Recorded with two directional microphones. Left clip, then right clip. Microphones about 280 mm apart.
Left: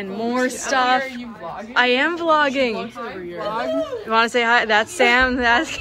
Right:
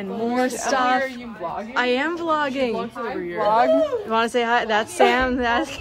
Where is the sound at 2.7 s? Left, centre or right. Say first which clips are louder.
Right 2 dB; right.